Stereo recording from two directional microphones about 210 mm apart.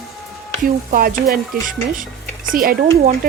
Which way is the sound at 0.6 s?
40° right (ahead or behind).